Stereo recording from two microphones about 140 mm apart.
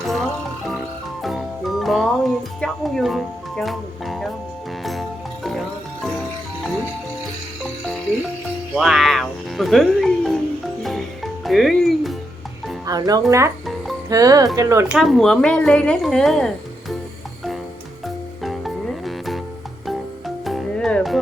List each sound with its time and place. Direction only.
0.0 s music: centre (ahead or behind)
8.7 s speech: centre (ahead or behind)
10.8 s music: centre (ahead or behind)
12.8 s speech: 25° right (ahead or behind)
14.8 s a woman's voice: centre (ahead or behind)
18.0 s music: centre (ahead or behind)